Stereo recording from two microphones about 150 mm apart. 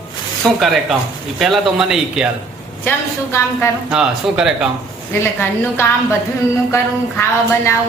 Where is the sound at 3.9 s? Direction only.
5° right (ahead or behind).